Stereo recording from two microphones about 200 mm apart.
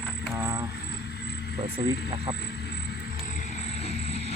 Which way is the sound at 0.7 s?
55° left (ahead or behind).